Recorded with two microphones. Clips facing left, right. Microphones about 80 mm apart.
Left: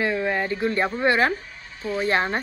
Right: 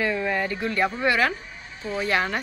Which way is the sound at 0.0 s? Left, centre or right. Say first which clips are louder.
Left 1 dB; left.